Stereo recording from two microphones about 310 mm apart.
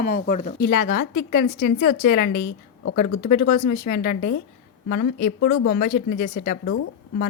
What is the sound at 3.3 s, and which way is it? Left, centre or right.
Speech, left.